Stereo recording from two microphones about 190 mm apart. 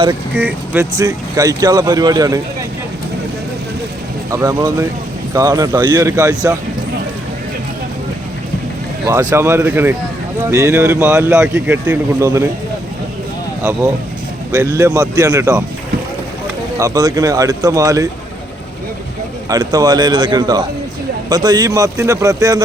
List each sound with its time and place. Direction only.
0.3 s speech: 10° right (ahead or behind)
4.3 s speech: 15° right (ahead or behind)
9.3 s speech: 15° right (ahead or behind)
13.6 s speech: 15° right (ahead or behind)
16.7 s speech: 20° right (ahead or behind)
19.5 s speech: 20° right (ahead or behind)